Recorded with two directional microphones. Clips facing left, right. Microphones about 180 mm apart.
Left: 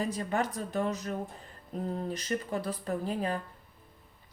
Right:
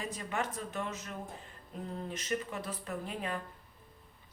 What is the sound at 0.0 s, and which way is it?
Speech, 35° left (ahead or behind).